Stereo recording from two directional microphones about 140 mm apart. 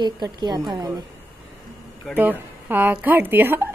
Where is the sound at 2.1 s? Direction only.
15° right (ahead or behind).